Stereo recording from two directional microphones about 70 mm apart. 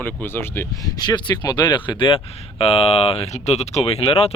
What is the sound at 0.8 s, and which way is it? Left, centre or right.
Speech, left.